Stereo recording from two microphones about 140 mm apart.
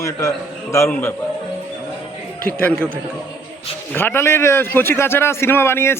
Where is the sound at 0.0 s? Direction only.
25° left (ahead or behind).